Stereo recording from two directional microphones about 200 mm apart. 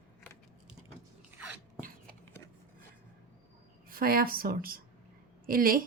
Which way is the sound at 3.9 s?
45° right (ahead or behind).